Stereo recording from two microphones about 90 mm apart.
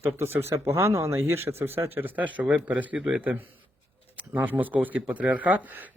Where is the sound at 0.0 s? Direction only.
25° right (ahead or behind).